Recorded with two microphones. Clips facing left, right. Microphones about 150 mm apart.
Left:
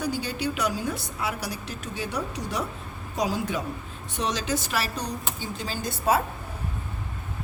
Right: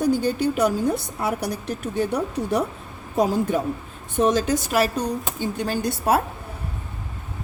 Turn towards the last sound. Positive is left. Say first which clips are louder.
# right 4 dB
turn(degrees=-60)  # may be behind; listen again after turning